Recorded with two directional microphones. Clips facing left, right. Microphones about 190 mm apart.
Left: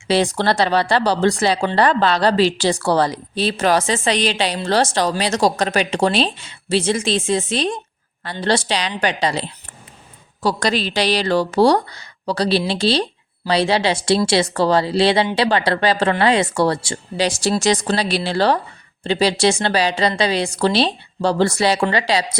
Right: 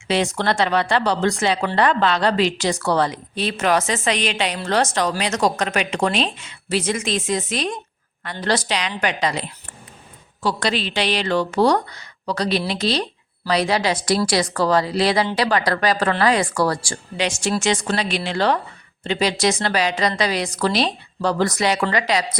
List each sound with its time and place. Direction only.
0.1 s speech: 35° left (ahead or behind)
17.2 s speech: 35° left (ahead or behind)